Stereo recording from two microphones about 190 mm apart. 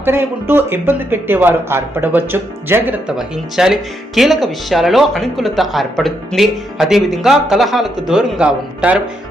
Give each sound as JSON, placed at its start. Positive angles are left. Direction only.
{"t": 0.0, "sound": "speech", "side_deg": -10}